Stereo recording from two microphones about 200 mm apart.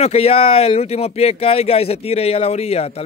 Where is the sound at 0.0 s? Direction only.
30° left (ahead or behind).